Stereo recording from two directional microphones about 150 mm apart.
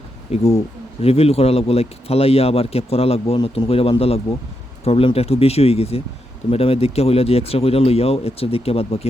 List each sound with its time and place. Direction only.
0.3 s speech: 45° left (ahead or behind)